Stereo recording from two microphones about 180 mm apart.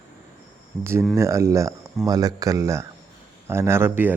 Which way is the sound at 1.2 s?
15° right (ahead or behind).